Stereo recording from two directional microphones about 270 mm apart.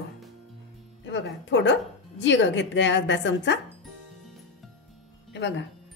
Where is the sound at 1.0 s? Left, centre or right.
Left.